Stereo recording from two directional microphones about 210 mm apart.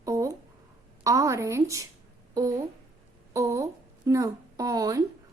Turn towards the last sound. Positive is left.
turn(degrees=-15)  # may be behind; listen again after turning